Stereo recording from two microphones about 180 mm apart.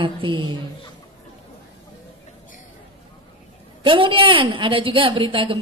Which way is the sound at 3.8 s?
30° right (ahead or behind).